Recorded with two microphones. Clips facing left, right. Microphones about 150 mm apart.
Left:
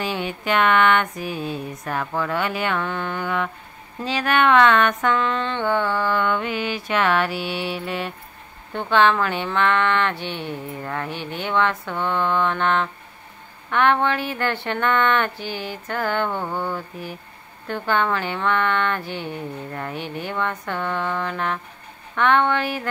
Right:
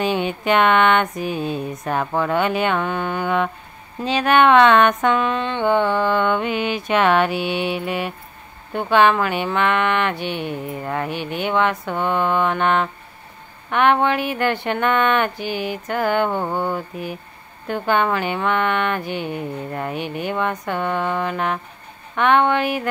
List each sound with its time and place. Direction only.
0.0 s speech: 20° right (ahead or behind)